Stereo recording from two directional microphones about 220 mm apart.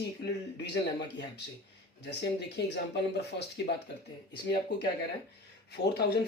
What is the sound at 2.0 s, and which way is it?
Speech, 50° left (ahead or behind).